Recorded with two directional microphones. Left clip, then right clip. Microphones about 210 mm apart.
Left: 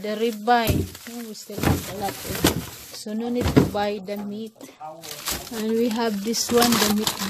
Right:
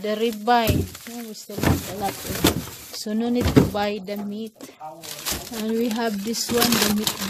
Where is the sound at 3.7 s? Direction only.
10° right (ahead or behind).